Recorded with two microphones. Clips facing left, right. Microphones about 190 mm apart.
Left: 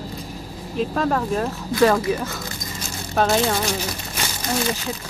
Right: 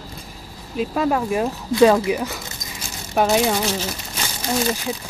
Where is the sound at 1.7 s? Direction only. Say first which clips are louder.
Right 3 dB; 20° right (ahead or behind).